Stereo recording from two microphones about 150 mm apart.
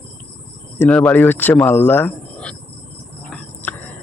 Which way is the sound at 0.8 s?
10° left (ahead or behind).